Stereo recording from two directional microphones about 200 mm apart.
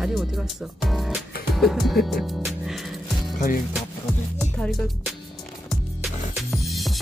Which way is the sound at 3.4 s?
45° left (ahead or behind).